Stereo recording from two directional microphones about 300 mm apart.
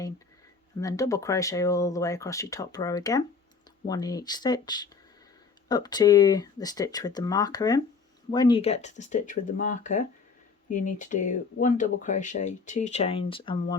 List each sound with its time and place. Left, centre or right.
0.8 s speech: centre